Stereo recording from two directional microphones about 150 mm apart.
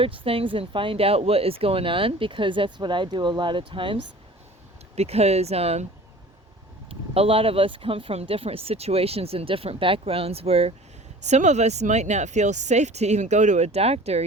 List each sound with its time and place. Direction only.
0.0 s speech: 40° right (ahead or behind)
4.9 s speech: 45° right (ahead or behind)
7.1 s speech: 40° right (ahead or behind)